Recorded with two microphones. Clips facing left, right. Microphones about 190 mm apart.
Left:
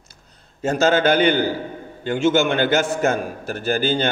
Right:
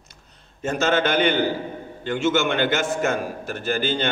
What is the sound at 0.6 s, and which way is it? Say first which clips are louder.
Mantra: left 4 dB; 35° left (ahead or behind).